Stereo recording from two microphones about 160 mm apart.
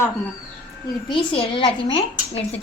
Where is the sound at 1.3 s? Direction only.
35° left (ahead or behind).